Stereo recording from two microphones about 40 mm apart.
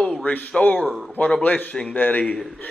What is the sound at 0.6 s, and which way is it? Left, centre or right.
A man's voice, left.